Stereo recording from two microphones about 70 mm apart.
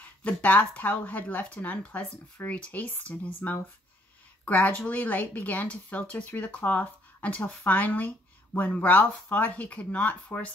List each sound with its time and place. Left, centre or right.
0.0 s speech: left